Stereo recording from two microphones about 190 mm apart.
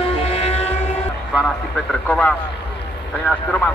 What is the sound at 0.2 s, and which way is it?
Vehicle, 30° left (ahead or behind).